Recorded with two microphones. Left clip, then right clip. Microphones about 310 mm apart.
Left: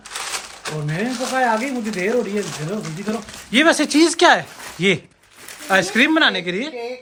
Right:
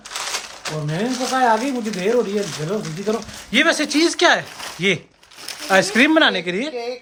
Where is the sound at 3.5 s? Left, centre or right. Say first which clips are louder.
Left 2 dB; centre.